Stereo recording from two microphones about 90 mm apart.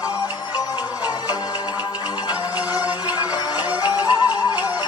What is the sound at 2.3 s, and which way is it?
Music, 45° left (ahead or behind).